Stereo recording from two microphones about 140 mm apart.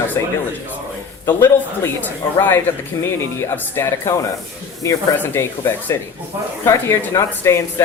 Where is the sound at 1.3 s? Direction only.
15° left (ahead or behind).